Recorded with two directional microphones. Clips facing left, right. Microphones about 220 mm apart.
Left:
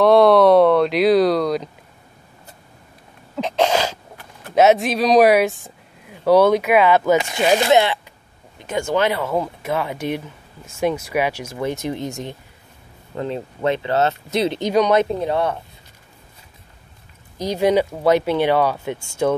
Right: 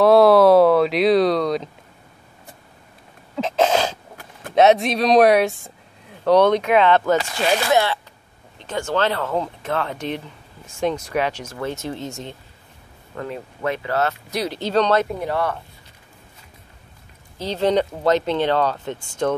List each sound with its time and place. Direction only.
0.0 s speech: 5° right (ahead or behind)
3.3 s a sound: centre (ahead or behind)
4.6 s speech: centre (ahead or behind)
7.2 s speech: 20° left (ahead or behind)
17.4 s speech: 10° left (ahead or behind)